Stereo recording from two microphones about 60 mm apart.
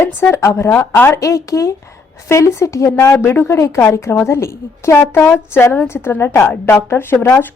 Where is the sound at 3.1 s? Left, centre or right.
Left.